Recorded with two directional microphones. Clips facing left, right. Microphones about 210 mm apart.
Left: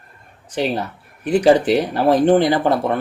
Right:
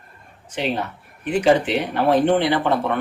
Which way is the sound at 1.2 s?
40° left (ahead or behind).